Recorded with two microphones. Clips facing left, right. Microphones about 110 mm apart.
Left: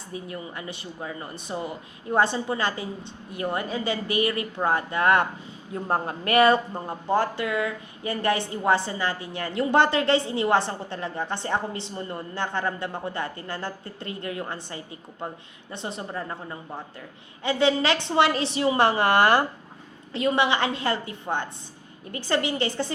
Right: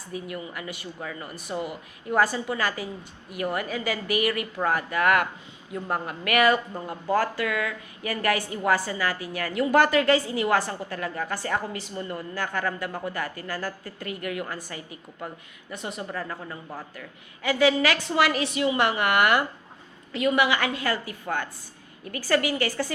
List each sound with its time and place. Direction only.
0.1 s speech: 30° left (ahead or behind)